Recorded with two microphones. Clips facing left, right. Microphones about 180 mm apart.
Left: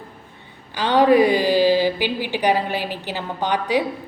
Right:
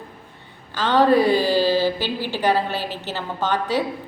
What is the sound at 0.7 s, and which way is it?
A woman's voice, 15° left (ahead or behind).